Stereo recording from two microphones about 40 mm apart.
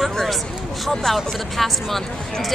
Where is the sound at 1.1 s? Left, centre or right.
Centre.